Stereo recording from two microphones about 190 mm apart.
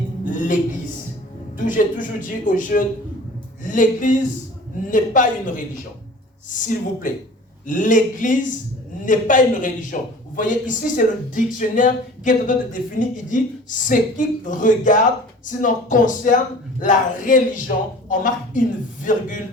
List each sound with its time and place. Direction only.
1.5 s a man's voice: 45° left (ahead or behind)